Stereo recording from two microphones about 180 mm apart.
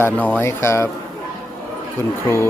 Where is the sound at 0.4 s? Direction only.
15° left (ahead or behind).